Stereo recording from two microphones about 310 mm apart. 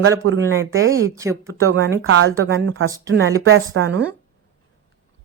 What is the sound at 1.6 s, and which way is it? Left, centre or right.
A woman's voice, right.